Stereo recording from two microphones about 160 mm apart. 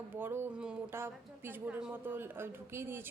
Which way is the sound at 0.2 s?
15° right (ahead or behind).